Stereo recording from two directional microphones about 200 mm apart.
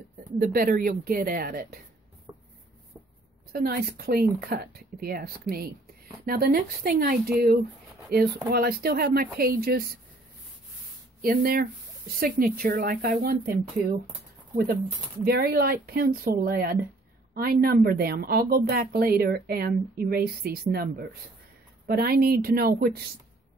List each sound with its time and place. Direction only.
0.4 s speech: 45° right (ahead or behind)
2.3 s writing: 15° right (ahead or behind)
3.5 s speech: 50° right (ahead or behind)
11.1 s speech: 45° right (ahead or behind)
15.2 s speech: 50° right (ahead or behind)